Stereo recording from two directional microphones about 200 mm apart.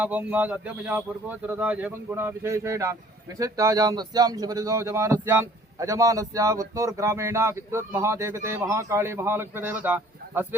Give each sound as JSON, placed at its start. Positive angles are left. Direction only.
{"t": 0.0, "sound": "speech", "side_deg": -5}